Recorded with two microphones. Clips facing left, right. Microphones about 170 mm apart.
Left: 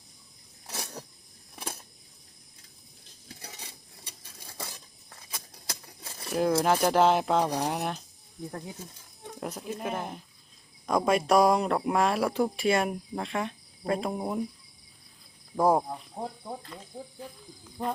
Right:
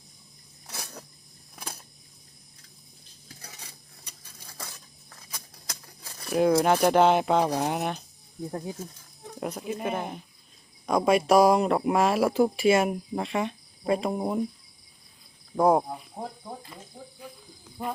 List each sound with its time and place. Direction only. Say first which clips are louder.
0.7 s a sound: left 2 dB; 25° left (ahead or behind)
3.4 s cutlery: left 2 dB; 25° left (ahead or behind)
4.7 s a sound: left 1 dB; 25° left (ahead or behind)
6.3 s speech: right 3 dB; centre (ahead or behind)
8.4 s speech: right 5 dB; 20° right (ahead or behind)
9.4 s speech: right 3 dB; 5° right (ahead or behind)
15.5 s speech: right 2 dB; centre (ahead or behind)